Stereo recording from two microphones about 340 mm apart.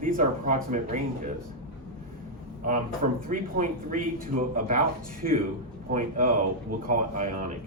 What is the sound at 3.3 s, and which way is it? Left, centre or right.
Speech, right.